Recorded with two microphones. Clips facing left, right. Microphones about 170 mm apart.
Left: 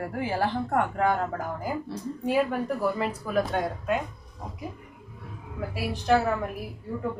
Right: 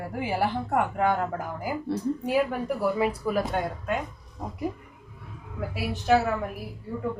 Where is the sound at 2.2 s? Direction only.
5° right (ahead or behind).